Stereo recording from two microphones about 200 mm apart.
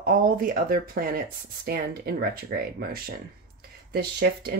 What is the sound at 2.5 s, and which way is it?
Speech, 50° right (ahead or behind).